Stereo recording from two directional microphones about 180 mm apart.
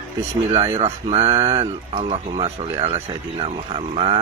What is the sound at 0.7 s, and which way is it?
Speech, 35° right (ahead or behind).